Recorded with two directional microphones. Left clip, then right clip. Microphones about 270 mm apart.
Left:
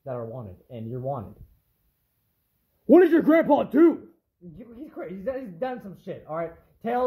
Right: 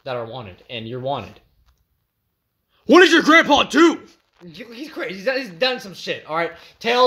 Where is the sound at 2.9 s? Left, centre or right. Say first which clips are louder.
Right 6 dB; centre.